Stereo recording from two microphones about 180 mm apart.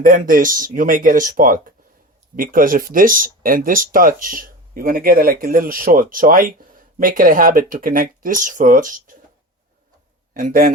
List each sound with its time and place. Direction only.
0.0 s speech: 50° right (ahead or behind)
10.3 s speech: 50° right (ahead or behind)